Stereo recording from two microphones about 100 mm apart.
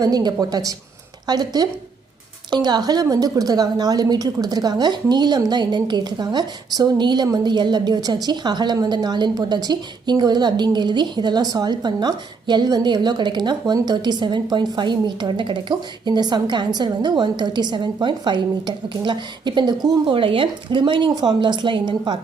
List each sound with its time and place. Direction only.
0.0 s a woman's voice: 40° right (ahead or behind)
20.1 s a woman's voice: 60° right (ahead or behind)